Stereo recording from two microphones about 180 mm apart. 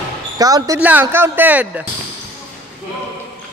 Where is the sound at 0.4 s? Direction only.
20° right (ahead or behind).